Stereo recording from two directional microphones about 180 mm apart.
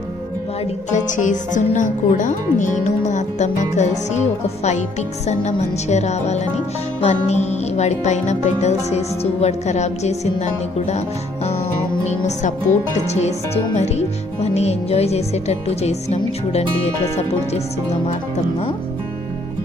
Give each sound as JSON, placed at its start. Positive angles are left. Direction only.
{"t": 1.1, "sound": "speech", "side_deg": 45}
{"t": 12.0, "sound": "speech", "side_deg": 40}